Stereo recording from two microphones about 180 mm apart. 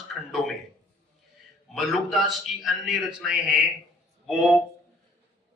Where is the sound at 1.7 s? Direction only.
Centre (ahead or behind).